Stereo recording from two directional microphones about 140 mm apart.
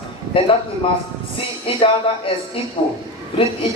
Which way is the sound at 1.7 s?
40° left (ahead or behind).